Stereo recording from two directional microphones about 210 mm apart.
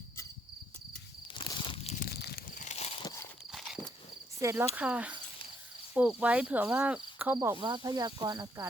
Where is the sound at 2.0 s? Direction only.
50° left (ahead or behind); by 3.1 s 30° left (ahead or behind).